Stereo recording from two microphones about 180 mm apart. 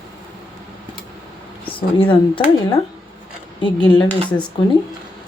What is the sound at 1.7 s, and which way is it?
A woman's voice, 30° left (ahead or behind).